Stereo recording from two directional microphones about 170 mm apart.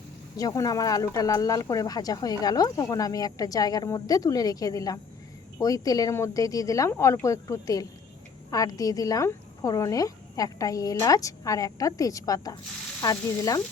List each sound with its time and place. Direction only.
0.3 s speech: 20° left (ahead or behind)